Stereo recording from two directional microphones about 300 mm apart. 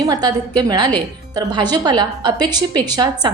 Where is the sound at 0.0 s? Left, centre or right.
Centre.